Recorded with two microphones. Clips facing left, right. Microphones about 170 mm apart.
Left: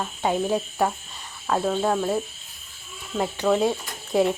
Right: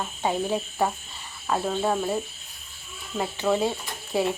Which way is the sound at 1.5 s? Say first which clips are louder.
Left 2 dB; 5° right (ahead or behind).